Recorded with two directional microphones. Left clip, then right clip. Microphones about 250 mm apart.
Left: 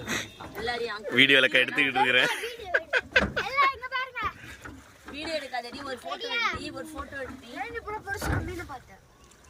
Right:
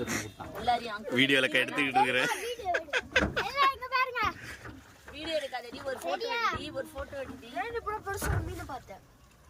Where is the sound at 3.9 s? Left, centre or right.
Right.